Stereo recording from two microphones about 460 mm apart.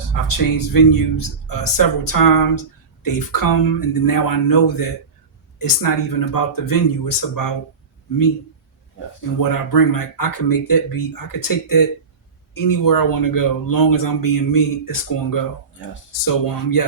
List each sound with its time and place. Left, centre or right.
0.1 s speech: left
9.4 s speech: left